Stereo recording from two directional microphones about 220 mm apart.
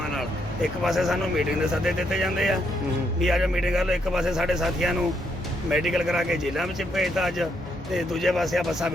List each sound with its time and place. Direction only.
0.1 s a man's voice: centre (ahead or behind)